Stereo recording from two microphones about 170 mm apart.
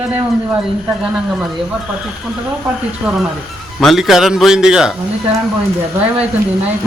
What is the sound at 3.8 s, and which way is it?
A man's voice, centre (ahead or behind).